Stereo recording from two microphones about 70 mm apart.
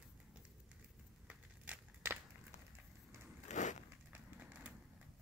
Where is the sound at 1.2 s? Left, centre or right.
Right.